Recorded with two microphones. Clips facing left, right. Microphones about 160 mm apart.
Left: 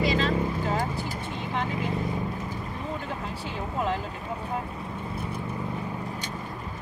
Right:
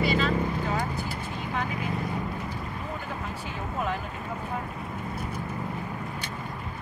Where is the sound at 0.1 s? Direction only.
35° left (ahead or behind).